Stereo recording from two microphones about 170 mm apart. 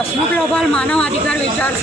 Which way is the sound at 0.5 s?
5° left (ahead or behind).